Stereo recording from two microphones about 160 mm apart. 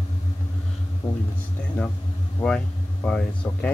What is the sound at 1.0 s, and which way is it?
Speech, 20° left (ahead or behind).